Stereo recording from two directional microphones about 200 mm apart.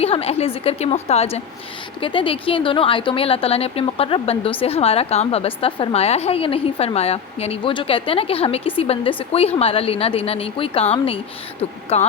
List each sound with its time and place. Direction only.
0.0 s a woman's voice: 30° left (ahead or behind)